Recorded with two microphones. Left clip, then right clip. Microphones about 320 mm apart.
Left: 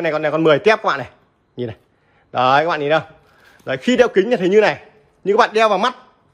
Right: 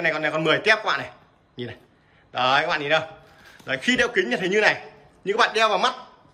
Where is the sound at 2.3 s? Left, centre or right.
Centre.